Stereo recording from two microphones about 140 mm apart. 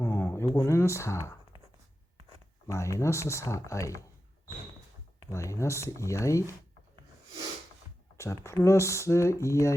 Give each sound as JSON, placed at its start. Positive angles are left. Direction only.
{"t": 0.0, "sound": "speech", "side_deg": 15}
{"t": 2.6, "sound": "speech", "side_deg": 20}
{"t": 5.3, "sound": "speech", "side_deg": 20}
{"t": 8.2, "sound": "speech", "side_deg": 20}